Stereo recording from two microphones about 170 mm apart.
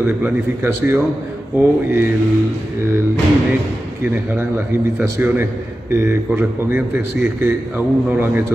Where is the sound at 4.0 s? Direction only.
10° right (ahead or behind).